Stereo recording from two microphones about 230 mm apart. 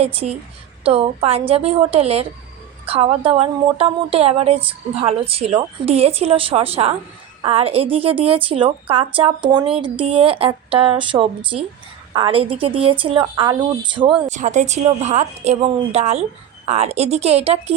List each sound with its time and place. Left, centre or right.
0.0 s a woman's voice: right
14.3 s a woman's voice: right